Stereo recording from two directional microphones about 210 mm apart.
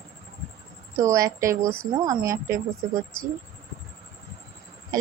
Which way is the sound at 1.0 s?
15° right (ahead or behind).